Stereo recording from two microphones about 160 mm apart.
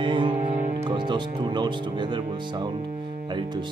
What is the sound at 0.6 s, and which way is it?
Music, 45° right (ahead or behind).